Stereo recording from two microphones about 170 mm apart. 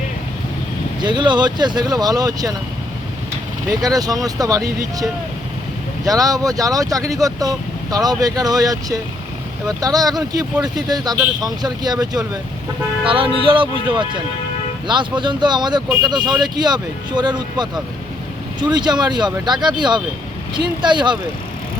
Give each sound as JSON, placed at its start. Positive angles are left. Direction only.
{"t": 1.0, "sound": "speech", "side_deg": -25}
{"t": 3.8, "sound": "speech", "side_deg": -20}
{"t": 6.1, "sound": "speech", "side_deg": -20}